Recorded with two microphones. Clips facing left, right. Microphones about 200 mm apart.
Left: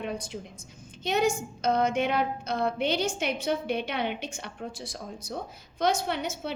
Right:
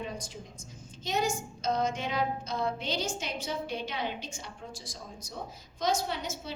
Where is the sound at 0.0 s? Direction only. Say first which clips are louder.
Left 5 dB; 65° left (ahead or behind).